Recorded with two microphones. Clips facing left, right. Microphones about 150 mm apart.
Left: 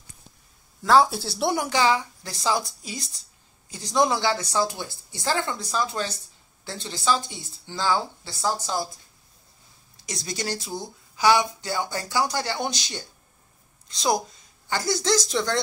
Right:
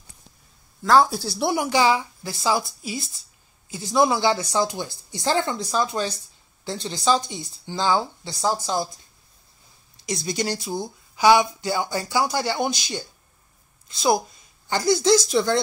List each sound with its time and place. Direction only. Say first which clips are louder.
0.8 s a woman's voice: right 1 dB; centre (ahead or behind)
1.4 s a woman's voice: right 2 dB; 10° right (ahead or behind)
10.0 s speech: right 5 dB; 15° right (ahead or behind)